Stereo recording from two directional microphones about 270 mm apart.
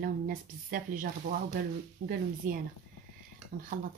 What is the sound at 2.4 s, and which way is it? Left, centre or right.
Speech, right.